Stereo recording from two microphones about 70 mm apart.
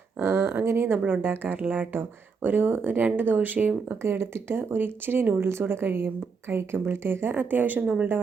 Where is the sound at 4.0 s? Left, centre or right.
Right.